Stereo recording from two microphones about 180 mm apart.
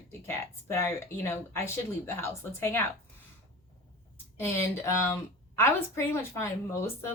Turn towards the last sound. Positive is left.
turn(degrees=15)  # may be behind; listen again after turning